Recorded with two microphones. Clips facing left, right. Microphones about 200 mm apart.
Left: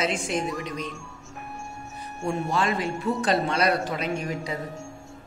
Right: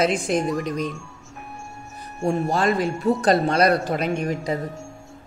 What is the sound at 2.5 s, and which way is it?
Speech, 40° right (ahead or behind).